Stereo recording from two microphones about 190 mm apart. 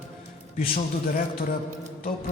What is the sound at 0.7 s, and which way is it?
Speech, 45° left (ahead or behind).